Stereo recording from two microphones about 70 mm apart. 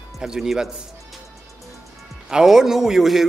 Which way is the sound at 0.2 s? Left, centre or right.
Centre.